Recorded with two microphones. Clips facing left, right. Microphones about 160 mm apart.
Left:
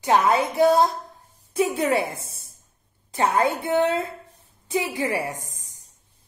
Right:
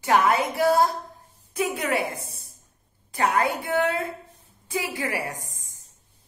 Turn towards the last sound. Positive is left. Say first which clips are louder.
# left 4 dB
turn(degrees=20)  # may be behind; listen again after turning